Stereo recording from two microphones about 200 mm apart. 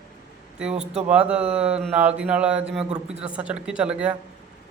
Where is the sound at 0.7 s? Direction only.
35° right (ahead or behind).